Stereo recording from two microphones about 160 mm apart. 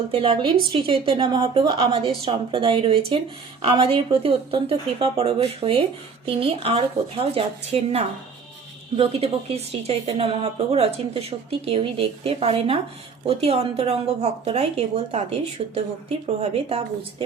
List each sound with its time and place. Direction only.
0.1 s a woman's voice: 35° right (ahead or behind)